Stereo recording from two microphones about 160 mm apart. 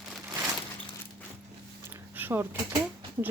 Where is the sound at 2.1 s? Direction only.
15° right (ahead or behind).